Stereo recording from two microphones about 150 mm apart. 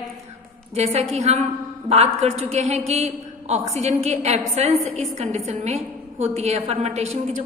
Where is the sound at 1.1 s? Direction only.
45° right (ahead or behind).